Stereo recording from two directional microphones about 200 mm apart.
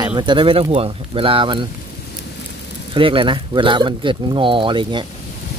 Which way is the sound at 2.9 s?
25° right (ahead or behind).